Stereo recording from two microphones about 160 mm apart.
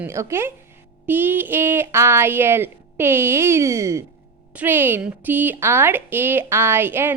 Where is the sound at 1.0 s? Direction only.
10° right (ahead or behind).